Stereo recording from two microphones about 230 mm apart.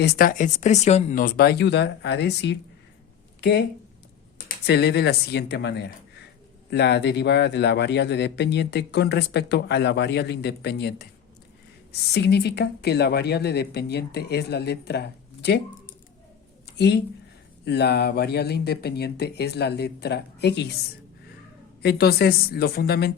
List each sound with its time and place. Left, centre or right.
0.0 s a man's voice: left
4.4 s a man's voice: left
16.7 s a man's voice: left
21.8 s a man's voice: left